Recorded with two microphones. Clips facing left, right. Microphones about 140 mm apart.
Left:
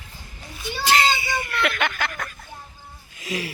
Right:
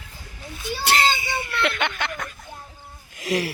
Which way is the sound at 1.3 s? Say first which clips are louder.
Even; 25° right (ahead or behind).